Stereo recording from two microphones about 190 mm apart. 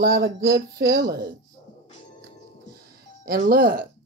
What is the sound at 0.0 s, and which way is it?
Speech, 55° right (ahead or behind).